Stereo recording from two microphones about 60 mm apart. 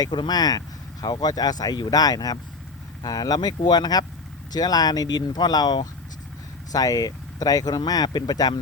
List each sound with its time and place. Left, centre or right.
0.0 s speech: left